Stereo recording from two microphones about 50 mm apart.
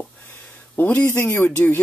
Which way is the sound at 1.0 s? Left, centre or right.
Left.